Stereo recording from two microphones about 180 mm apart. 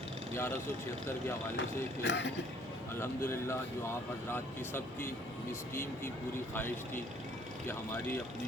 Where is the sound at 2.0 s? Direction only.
75° left (ahead or behind).